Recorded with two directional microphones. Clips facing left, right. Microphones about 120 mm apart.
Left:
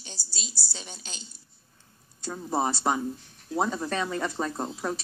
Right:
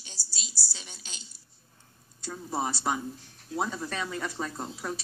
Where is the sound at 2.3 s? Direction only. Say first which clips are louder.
Left 4 dB; 30° left (ahead or behind).